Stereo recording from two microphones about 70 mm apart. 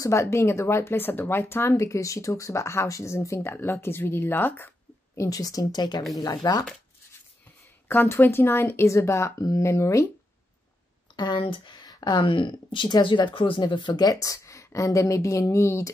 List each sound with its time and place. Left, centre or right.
0.0 s speech: left
5.1 s speech: left
6.2 s speech: left
7.9 s speech: left
11.1 s speech: left
14.3 s speech: left